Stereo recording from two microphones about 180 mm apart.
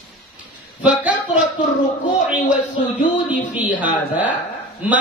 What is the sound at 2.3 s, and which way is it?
Speech, 45° left (ahead or behind).